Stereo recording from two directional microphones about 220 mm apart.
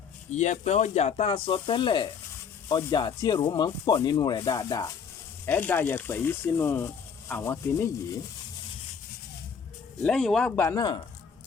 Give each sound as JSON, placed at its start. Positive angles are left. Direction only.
{"t": 0.3, "sound": "speech", "side_deg": 30}
{"t": 10.0, "sound": "speech", "side_deg": 5}